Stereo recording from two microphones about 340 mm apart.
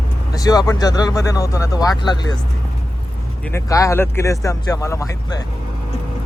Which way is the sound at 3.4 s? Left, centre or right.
Centre.